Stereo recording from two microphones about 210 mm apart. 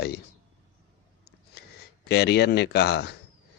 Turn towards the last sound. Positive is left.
turn(degrees=50)  # may be behind; listen again after turning